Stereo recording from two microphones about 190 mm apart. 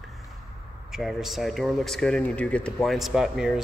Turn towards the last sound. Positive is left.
turn(degrees=-5)  # may be behind; listen again after turning